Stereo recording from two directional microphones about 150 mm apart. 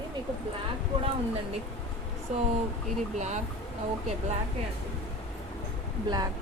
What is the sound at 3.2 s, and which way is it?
Speech, 50° right (ahead or behind).